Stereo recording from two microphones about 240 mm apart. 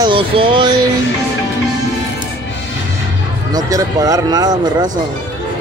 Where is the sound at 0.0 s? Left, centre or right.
Right.